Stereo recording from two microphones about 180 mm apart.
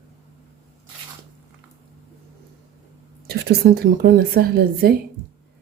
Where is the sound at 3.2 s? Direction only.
60° right (ahead or behind).